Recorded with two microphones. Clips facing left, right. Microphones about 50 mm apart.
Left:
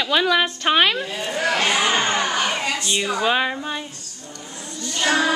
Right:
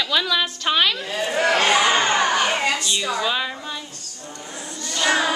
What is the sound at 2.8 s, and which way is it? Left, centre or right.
Speech, left.